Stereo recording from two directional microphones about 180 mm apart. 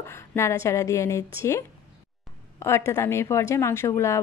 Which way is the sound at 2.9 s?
15° left (ahead or behind).